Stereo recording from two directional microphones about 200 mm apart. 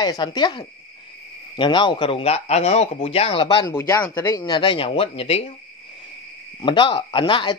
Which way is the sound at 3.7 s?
10° left (ahead or behind).